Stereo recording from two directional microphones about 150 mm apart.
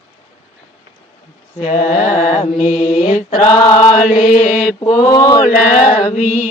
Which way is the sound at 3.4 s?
35° left (ahead or behind).